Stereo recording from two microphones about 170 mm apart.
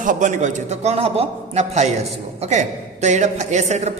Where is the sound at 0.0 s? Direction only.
50° right (ahead or behind).